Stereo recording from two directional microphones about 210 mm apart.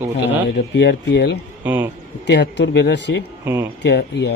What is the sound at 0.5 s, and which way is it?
Speech, 55° left (ahead or behind).